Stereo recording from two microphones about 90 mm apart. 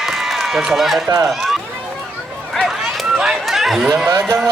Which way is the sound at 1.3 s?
Centre (ahead or behind).